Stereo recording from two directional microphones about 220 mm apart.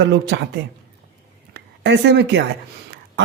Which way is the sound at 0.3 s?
55° right (ahead or behind).